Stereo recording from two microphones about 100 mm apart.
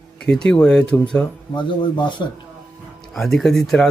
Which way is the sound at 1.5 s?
50° left (ahead or behind).